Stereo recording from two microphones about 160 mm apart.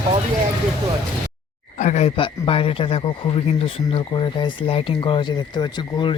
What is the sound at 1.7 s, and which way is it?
Speech, 50° left (ahead or behind).